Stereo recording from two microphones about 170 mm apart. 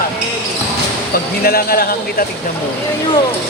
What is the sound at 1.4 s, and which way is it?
Speech, 60° left (ahead or behind).